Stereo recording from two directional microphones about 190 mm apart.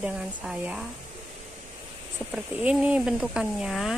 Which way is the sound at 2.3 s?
5° right (ahead or behind).